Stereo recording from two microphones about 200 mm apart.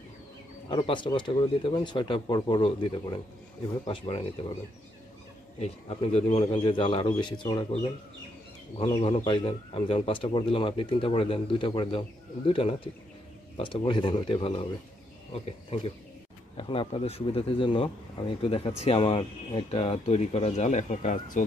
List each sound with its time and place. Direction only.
0.7 s a man's voice: 25° left (ahead or behind)
5.6 s a man's voice: 30° left (ahead or behind)